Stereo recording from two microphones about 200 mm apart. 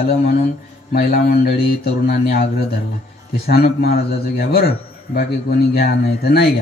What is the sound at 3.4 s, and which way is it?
A man's voice, 50° left (ahead or behind).